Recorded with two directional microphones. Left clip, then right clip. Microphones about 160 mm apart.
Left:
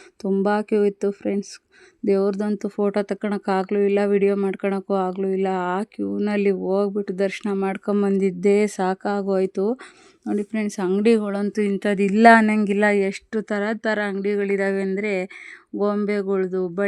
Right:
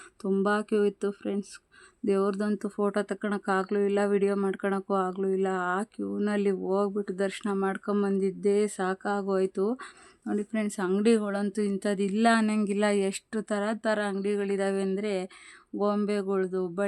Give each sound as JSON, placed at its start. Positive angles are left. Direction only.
{"t": 0.2, "sound": "speech", "side_deg": 20}
{"t": 0.4, "sound": "speech", "side_deg": 30}
{"t": 8.2, "sound": "speech", "side_deg": 55}
{"t": 12.5, "sound": "speech", "side_deg": 25}